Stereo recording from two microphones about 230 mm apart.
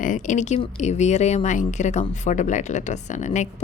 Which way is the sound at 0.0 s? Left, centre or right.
Left.